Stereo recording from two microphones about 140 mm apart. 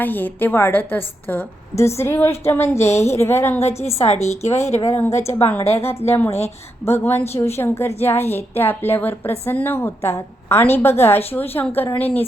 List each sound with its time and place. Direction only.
0.0 s a woman's voice: 15° left (ahead or behind)
3.6 s a woman's voice: 50° left (ahead or behind)
4.8 s a woman's voice: 20° left (ahead or behind)